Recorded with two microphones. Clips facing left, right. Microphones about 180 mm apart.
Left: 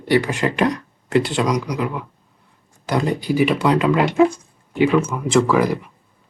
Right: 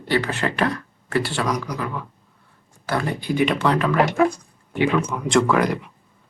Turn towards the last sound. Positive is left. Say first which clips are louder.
# left 2 dB
turn(degrees=0)  # may be behind; listen again after turning